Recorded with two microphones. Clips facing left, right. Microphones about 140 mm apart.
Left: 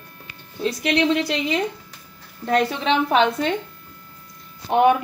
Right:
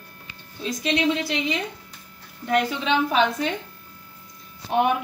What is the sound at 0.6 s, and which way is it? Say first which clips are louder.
Speech: left 3 dB; 60° left (ahead or behind).